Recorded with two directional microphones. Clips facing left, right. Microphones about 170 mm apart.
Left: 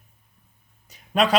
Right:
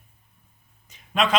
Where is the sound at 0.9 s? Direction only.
40° left (ahead or behind).